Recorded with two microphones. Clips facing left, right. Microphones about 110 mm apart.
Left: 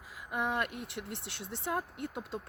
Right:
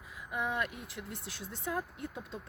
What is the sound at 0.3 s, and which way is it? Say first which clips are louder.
Speech: left 2 dB; 65° left (ahead or behind).